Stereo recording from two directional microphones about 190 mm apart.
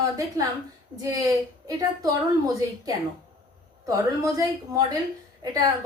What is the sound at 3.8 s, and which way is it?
A woman's voice, 15° right (ahead or behind).